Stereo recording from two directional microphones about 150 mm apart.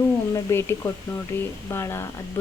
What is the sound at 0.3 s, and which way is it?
Speech, 15° left (ahead or behind).